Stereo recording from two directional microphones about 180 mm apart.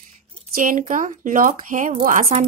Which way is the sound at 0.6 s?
45° right (ahead or behind).